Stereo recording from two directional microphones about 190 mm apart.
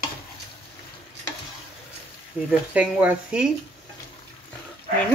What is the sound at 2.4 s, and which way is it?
Speech, 5° right (ahead or behind).